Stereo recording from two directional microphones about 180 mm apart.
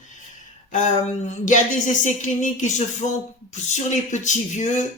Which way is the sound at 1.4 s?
45° left (ahead or behind).